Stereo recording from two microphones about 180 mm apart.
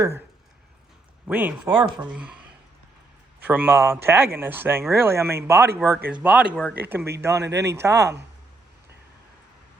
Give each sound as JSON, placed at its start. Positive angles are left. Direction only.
{"t": 1.3, "sound": "speech", "side_deg": -10}
{"t": 3.4, "sound": "speech", "side_deg": -10}